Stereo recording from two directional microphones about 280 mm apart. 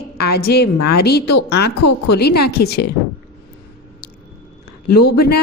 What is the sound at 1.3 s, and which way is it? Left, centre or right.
Speech, left.